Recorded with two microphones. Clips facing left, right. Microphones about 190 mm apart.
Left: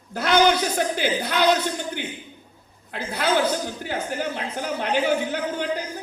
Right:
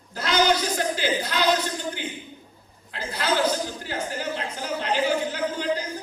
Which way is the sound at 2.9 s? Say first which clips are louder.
Left 3 dB; 55° left (ahead or behind).